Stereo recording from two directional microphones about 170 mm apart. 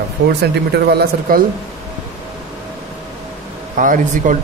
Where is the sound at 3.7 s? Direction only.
50° right (ahead or behind).